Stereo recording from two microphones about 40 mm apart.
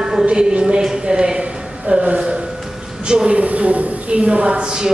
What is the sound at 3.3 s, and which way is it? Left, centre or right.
A woman's voice, right.